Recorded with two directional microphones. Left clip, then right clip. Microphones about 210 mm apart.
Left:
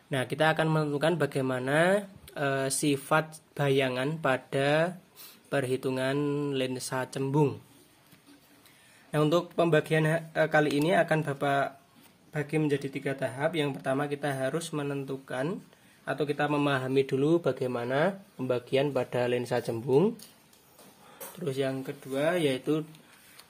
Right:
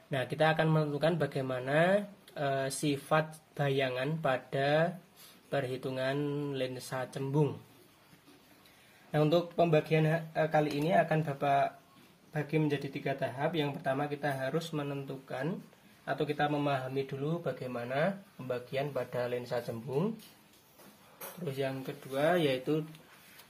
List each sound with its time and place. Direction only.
0.1 s a man's voice: 25° left (ahead or behind)
9.1 s a man's voice: 25° left (ahead or behind)
17.7 s speech: 55° left (ahead or behind)
21.5 s a man's voice: 30° left (ahead or behind)